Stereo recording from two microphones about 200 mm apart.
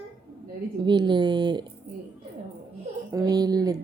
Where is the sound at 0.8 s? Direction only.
20° right (ahead or behind).